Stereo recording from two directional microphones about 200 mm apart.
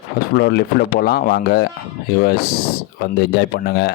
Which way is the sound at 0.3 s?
55° left (ahead or behind).